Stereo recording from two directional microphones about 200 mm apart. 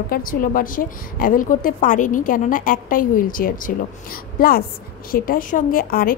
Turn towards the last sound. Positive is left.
turn(degrees=45)  # may be behind; listen again after turning